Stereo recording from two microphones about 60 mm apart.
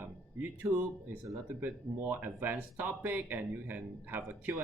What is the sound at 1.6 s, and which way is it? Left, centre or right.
Speech, right.